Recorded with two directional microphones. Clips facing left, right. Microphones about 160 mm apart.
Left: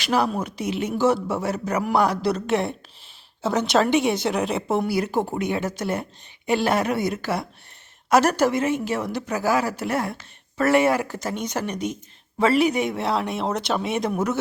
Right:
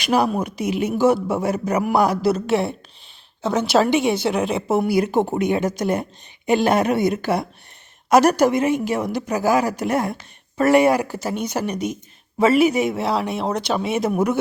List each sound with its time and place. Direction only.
0.0 s a woman's voice: 15° right (ahead or behind)